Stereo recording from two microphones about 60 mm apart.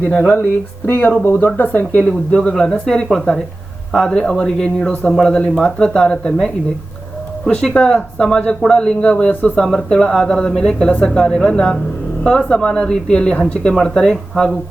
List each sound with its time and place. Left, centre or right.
0.0 s speech: left
2.0 s speech: centre